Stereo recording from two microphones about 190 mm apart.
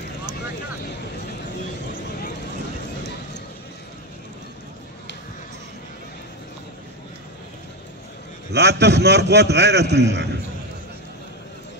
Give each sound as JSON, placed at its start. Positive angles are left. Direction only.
{"t": 8.5, "sound": "a man's voice", "side_deg": -65}